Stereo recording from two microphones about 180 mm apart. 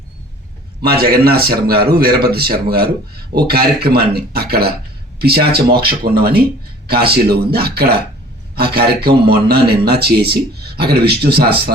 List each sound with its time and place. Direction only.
0.8 s a man's voice: 60° right (ahead or behind)